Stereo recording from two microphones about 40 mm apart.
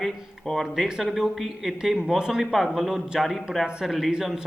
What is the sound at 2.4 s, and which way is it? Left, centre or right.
Speech, centre.